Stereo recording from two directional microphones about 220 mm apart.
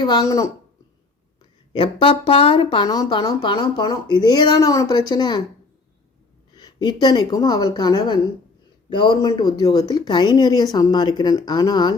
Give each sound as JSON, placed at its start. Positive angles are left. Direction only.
{"t": 0.0, "sound": "a woman's voice", "side_deg": 20}
{"t": 1.8, "sound": "speech", "side_deg": 25}
{"t": 6.6, "sound": "speech", "side_deg": 20}